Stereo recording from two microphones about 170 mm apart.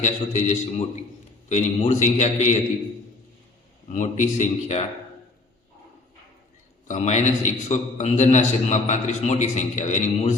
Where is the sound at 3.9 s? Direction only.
45° left (ahead or behind).